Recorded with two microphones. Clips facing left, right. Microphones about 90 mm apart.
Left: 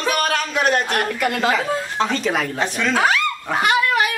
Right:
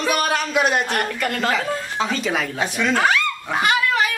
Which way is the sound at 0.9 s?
5° left (ahead or behind).